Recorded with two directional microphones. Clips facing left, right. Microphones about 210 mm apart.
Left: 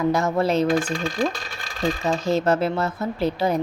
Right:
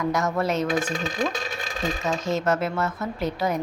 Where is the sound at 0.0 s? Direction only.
30° left (ahead or behind).